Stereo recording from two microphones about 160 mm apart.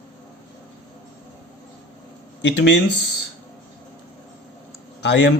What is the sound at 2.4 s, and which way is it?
Speech, 90° left.